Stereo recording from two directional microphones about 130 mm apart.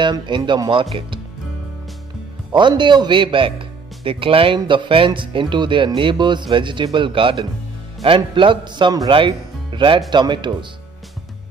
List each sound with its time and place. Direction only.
0.0 s speech: 35° right (ahead or behind)
2.5 s speech: 35° right (ahead or behind)